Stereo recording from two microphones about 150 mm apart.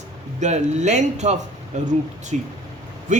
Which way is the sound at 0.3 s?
50° right (ahead or behind).